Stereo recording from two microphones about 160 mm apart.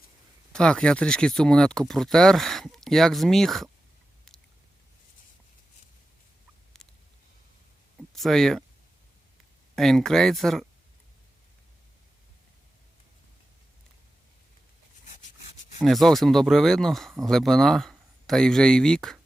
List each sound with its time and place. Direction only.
0.5 s speech: 5° left (ahead or behind)
4.3 s chewing: 5° left (ahead or behind)
6.8 s a sound: 5° left (ahead or behind)
7.9 s a sound: centre (ahead or behind)
9.7 s speech: centre (ahead or behind)
15.8 s speech: centre (ahead or behind)